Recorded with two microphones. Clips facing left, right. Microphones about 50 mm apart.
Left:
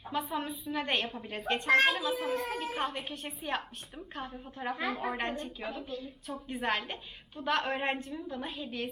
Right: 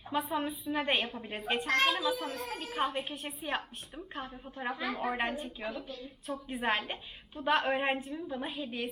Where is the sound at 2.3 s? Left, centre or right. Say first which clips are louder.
Left 5 dB; centre.